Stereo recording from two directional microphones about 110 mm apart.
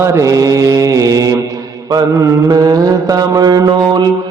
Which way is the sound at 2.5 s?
35° right (ahead or behind).